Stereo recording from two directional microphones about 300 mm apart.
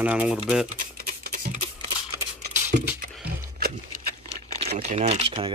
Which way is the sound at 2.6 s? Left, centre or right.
Centre.